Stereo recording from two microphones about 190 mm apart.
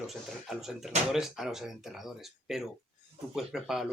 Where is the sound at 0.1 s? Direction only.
Centre (ahead or behind).